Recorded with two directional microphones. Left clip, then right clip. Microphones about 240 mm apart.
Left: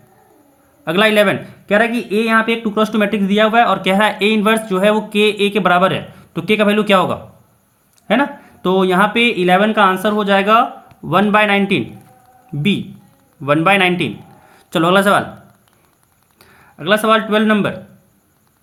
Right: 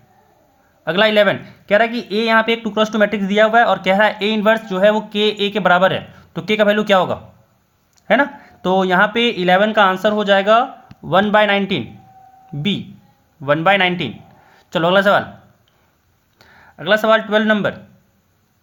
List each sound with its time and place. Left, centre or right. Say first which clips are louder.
0.9 s speech: left 1 dB; centre
13.4 s a man's voice: left 1 dB; right
16.4 s speech: left 1 dB; right